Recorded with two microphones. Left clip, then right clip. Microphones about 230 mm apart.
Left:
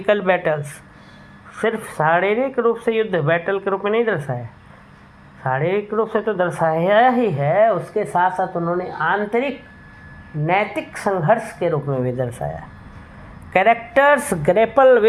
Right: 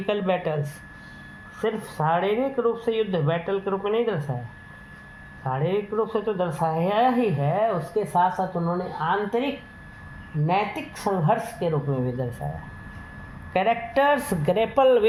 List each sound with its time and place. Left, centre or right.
0.0 s speech: left
2.0 s speech: left
5.4 s speech: left
13.5 s a woman's voice: left